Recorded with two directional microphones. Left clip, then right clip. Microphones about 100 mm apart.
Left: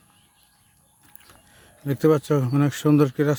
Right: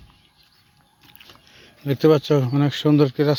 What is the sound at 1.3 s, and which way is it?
Speech, 30° left (ahead or behind).